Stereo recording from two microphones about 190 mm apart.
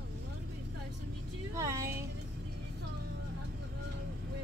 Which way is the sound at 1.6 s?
15° right (ahead or behind).